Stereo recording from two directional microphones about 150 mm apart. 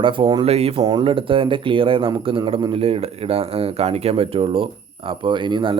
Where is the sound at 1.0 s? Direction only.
35° right (ahead or behind).